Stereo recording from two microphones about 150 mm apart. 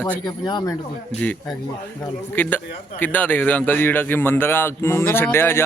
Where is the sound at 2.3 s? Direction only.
10° left (ahead or behind).